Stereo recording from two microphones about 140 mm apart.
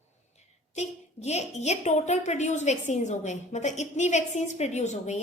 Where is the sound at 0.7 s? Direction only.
55° left (ahead or behind).